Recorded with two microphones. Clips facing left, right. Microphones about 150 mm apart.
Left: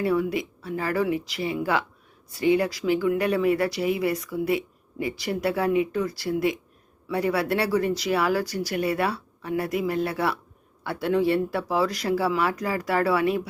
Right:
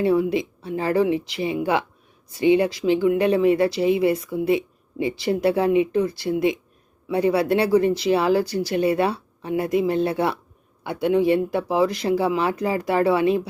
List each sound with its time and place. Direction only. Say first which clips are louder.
0.0 s speech: right 4 dB; 25° right (ahead or behind)